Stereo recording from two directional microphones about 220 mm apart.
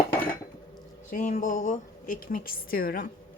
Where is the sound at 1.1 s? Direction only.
35° left (ahead or behind).